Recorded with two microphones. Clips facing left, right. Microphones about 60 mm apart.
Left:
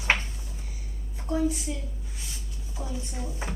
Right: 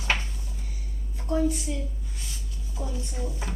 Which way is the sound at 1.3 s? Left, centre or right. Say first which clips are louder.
Right 1 dB; centre.